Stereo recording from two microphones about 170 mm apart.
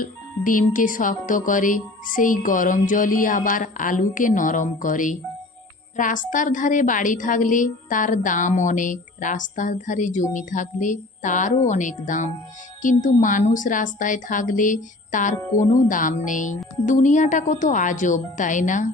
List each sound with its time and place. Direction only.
0.0 s speech: 50° left (ahead or behind)